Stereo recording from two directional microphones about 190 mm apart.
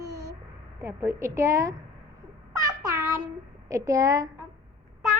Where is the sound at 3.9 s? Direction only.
15° right (ahead or behind).